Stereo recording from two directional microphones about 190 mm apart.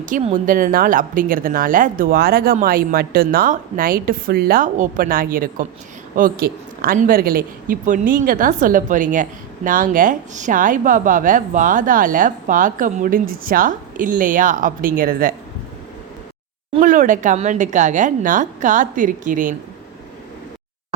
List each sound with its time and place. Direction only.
0.0 s a woman's voice: 40° right (ahead or behind)
16.8 s a woman's voice: 40° right (ahead or behind)